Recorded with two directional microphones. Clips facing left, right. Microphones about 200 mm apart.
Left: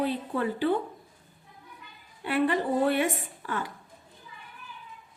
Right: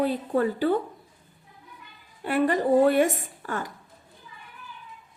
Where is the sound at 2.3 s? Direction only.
45° right (ahead or behind).